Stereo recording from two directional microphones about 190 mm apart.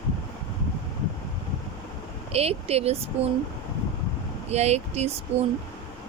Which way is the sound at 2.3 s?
30° right (ahead or behind).